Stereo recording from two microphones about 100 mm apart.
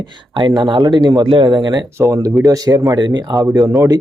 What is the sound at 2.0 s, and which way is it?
Speech, 35° right (ahead or behind).